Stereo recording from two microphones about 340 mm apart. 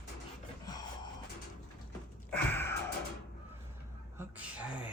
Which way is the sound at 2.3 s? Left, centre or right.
Centre.